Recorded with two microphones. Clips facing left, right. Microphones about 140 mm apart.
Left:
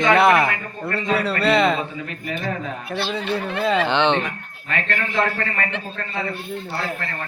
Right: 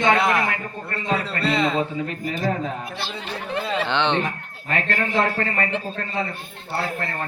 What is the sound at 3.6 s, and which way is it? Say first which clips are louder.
Speech: left 4 dB; 85° left.